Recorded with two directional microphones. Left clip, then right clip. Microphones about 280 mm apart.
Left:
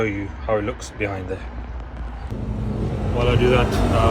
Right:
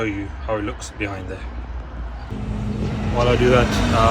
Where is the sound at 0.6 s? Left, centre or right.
Centre.